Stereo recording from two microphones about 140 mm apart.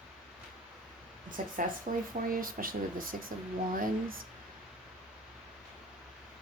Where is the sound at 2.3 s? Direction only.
90° right.